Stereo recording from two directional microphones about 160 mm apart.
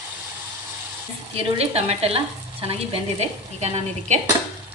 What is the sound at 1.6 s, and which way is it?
A woman's voice, 40° right (ahead or behind).